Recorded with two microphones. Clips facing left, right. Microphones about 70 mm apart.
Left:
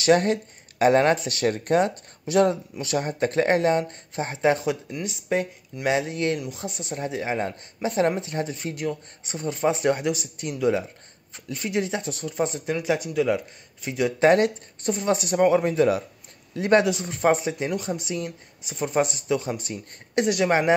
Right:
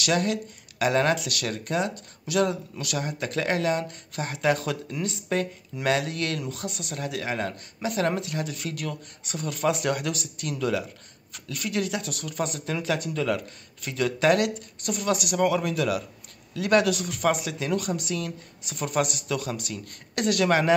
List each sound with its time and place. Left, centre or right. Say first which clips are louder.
0.0 s speech: left 6 dB; left